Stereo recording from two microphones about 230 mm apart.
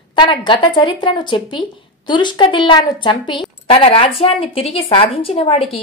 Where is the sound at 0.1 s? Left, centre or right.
Centre.